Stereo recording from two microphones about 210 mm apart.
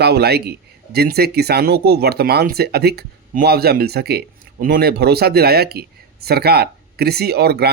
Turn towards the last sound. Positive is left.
turn(degrees=-50)  # may be behind; listen again after turning